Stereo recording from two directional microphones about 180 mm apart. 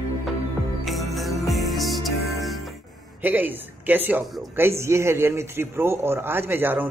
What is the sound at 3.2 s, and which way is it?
A man's voice, 10° right (ahead or behind).